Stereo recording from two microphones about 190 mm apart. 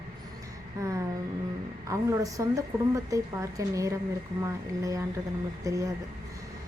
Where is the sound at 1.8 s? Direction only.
15° right (ahead or behind).